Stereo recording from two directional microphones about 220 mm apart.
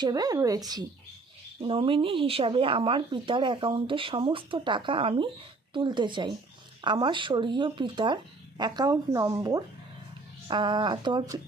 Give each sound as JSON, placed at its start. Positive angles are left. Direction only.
{"t": 0.0, "sound": "speech", "side_deg": -15}